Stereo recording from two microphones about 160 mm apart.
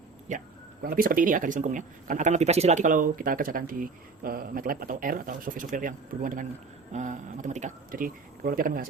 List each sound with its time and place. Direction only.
0.3 s speech: 60° right (ahead or behind)